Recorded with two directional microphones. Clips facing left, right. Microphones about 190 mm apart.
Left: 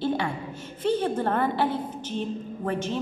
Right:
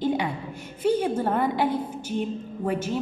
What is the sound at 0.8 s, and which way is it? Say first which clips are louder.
Music: right 2 dB; 10° right (ahead or behind).